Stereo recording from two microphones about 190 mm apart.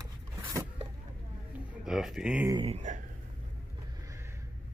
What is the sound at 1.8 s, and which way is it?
Speech, centre (ahead or behind).